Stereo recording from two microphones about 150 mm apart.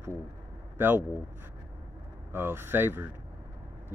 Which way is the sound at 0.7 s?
15° right (ahead or behind).